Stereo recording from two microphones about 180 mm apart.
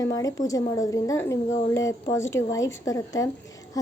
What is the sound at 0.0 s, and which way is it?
Speech, 20° left (ahead or behind).